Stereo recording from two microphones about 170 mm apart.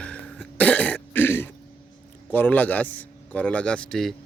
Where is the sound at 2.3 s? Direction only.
10° left (ahead or behind).